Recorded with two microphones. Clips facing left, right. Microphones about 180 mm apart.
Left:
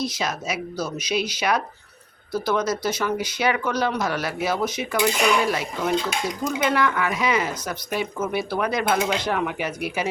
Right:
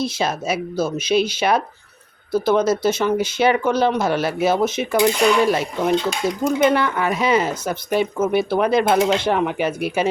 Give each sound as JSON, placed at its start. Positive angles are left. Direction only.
{"t": 0.0, "sound": "speech", "side_deg": -30}